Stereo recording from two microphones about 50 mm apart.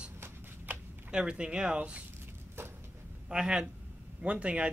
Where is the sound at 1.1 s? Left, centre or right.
Centre.